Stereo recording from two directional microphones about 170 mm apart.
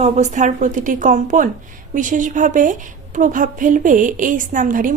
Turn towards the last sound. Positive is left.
turn(degrees=-50)  # may be behind; listen again after turning